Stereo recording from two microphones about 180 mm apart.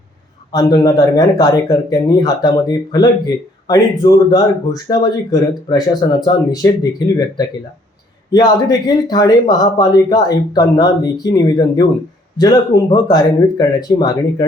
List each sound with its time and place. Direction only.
0.5 s speech: 20° left (ahead or behind)